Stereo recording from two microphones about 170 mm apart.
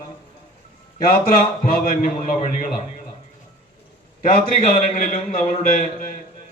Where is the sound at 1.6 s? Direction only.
55° left (ahead or behind).